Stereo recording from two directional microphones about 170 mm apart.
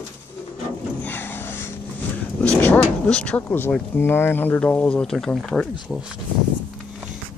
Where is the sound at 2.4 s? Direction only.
10° left (ahead or behind).